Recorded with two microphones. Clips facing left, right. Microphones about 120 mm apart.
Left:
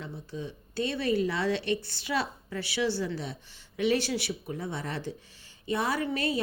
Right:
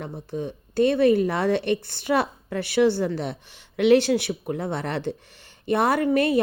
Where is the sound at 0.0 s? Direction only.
55° right (ahead or behind).